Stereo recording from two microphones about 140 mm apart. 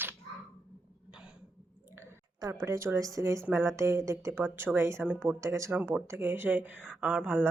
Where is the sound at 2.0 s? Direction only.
20° right (ahead or behind).